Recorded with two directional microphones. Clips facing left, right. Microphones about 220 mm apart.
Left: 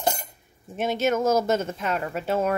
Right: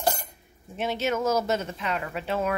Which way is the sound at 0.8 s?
45° left (ahead or behind).